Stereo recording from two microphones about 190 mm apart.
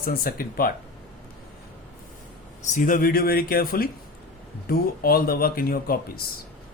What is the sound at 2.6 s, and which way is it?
Speech, 40° left (ahead or behind).